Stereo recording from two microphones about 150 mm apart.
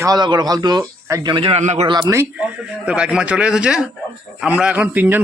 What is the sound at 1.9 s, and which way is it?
Speech, 25° right (ahead or behind).